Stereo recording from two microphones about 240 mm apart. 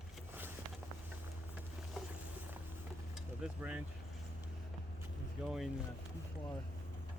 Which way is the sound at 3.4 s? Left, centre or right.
Centre.